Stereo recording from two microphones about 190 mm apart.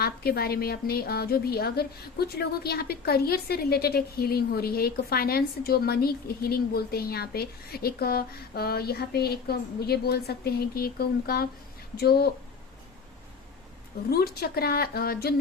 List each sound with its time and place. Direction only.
0.0 s a woman's voice: 55° left (ahead or behind)
14.1 s a woman's voice: 55° left (ahead or behind)